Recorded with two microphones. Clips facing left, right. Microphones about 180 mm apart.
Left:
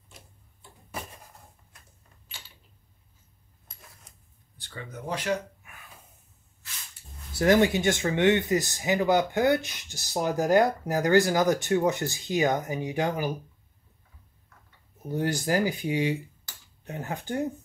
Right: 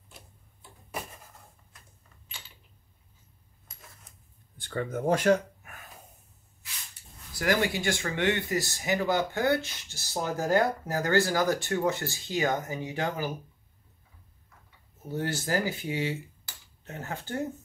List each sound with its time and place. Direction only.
4.6 s speech: 50° right (ahead or behind)
7.3 s speech: 25° left (ahead or behind)
15.0 s speech: 15° left (ahead or behind)